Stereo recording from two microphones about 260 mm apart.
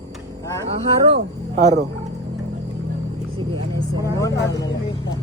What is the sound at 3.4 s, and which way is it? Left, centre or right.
Vehicle, centre.